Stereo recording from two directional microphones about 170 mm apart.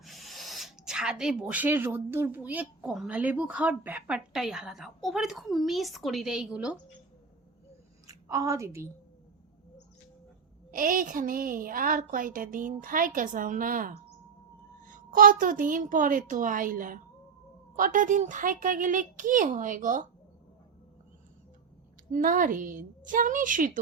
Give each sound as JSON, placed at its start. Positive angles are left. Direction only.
{"t": 0.0, "sound": "speech", "side_deg": 0}
{"t": 8.0, "sound": "a woman's voice", "side_deg": -20}
{"t": 10.7, "sound": "speech", "side_deg": -55}
{"t": 22.1, "sound": "speech", "side_deg": -50}